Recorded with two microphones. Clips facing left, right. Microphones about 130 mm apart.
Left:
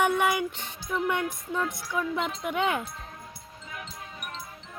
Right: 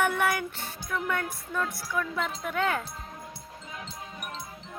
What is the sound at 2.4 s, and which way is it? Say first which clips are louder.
Speech: left 1 dB; 15° left (ahead or behind).